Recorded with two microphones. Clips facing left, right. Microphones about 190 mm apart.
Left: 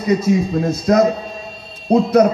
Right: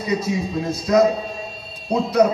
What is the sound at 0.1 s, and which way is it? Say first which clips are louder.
A man's voice: left 7 dB; 50° left (ahead or behind).